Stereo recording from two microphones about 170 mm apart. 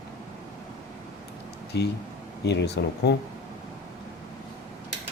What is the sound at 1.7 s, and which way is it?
Speech, 85° left.